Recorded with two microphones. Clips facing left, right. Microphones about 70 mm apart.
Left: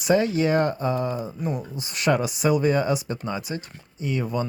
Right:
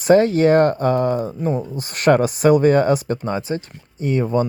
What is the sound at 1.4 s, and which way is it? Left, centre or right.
Speech, right.